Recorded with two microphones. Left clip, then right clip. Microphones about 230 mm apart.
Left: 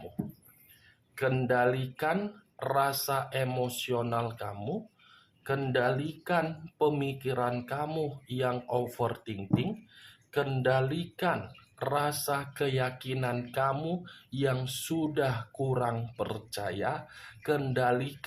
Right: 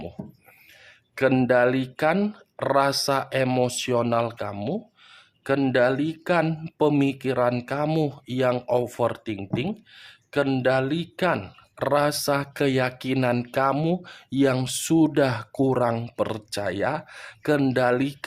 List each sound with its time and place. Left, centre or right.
1.1 s speech: right